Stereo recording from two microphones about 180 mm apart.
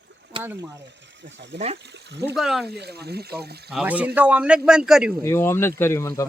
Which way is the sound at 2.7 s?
65° right (ahead or behind).